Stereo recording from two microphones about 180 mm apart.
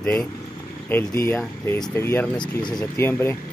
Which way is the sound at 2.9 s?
15° left (ahead or behind).